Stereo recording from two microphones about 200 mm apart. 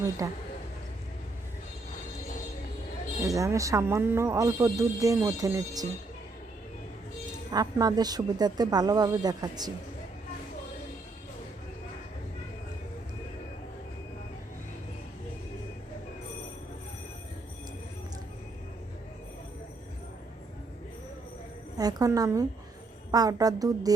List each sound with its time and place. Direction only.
0.2 s speech: 15° right (ahead or behind)
3.2 s speech: 15° right (ahead or behind)
7.5 s speech: 20° right (ahead or behind)
21.8 s a woman's voice: 20° right (ahead or behind)